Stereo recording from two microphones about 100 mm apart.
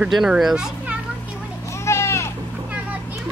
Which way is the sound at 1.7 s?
30° left (ahead or behind).